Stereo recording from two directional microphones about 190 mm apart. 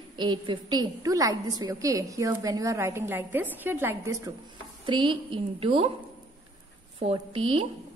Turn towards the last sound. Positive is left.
turn(degrees=-30)  # may be behind; listen again after turning